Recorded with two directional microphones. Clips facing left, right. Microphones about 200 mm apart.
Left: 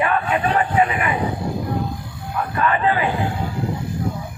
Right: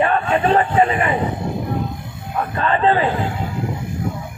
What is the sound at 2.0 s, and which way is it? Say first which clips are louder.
Speech: right 2 dB; 25° right (ahead or behind).